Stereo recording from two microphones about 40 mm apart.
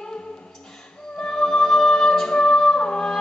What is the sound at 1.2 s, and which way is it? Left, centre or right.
Music, centre.